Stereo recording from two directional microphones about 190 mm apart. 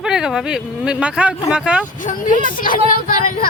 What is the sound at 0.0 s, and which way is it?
Speech, 5° right (ahead or behind).